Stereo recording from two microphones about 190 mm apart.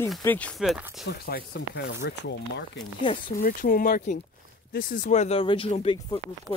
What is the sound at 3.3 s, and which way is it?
Speech, 50° left (ahead or behind).